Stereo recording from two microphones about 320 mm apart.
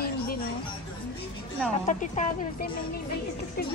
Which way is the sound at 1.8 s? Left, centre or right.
Left.